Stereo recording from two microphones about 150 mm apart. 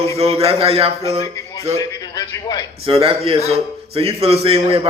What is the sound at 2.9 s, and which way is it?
A man's voice, 40° right (ahead or behind).